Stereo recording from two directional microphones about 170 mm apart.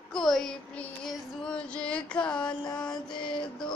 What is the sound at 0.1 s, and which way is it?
Child singing, centre (ahead or behind).